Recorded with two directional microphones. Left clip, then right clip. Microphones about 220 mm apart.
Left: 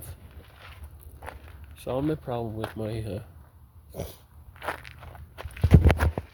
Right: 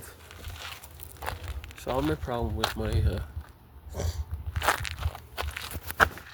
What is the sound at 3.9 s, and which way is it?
Dog, 25° left (ahead or behind).